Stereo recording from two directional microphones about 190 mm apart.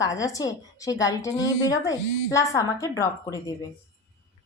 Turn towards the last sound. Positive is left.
turn(degrees=20)  # may be behind; listen again after turning